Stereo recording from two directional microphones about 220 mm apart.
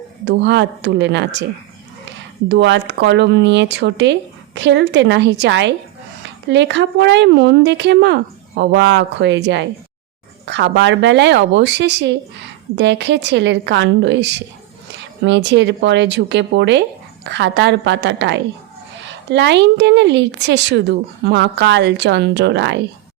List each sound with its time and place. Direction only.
0.3 s speech: 50° right (ahead or behind)
2.5 s speech: 55° right (ahead or behind)